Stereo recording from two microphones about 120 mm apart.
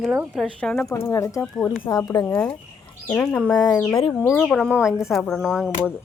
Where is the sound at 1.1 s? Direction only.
25° left (ahead or behind).